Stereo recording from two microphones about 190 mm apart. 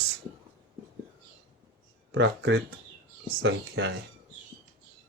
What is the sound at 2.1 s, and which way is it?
Speech, 70° right (ahead or behind).